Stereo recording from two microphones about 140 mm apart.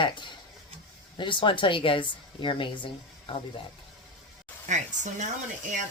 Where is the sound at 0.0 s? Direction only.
35° left (ahead or behind).